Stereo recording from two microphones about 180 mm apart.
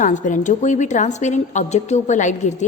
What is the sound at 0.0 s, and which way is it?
A woman's voice, 45° left (ahead or behind).